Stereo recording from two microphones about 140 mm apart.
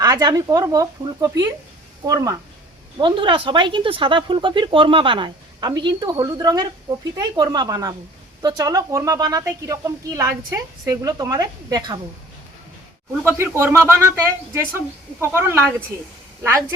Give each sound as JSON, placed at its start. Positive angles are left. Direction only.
{"t": 0.0, "sound": "speech", "side_deg": -25}
{"t": 3.0, "sound": "speech", "side_deg": -35}
{"t": 13.2, "sound": "a man's voice", "side_deg": -15}